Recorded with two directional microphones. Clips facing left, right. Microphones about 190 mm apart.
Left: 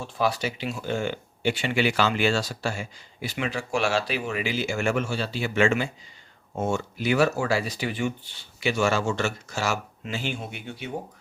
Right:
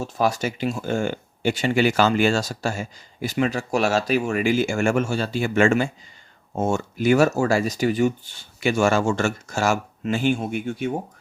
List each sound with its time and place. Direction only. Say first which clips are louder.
0.0 s speech: right 3 dB; 45° right (ahead or behind)